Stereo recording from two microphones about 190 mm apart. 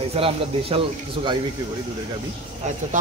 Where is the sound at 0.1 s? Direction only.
30° right (ahead or behind).